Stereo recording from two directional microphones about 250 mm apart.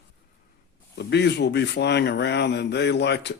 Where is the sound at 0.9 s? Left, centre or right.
Left.